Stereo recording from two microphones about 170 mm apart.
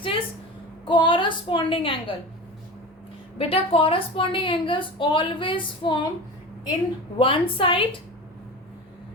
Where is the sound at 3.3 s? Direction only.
35° left (ahead or behind).